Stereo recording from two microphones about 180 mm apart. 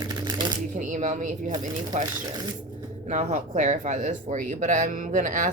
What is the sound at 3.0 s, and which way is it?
A woman's voice, 45° right (ahead or behind).